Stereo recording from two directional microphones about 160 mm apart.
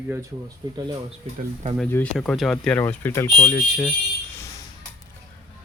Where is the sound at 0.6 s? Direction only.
25° right (ahead or behind).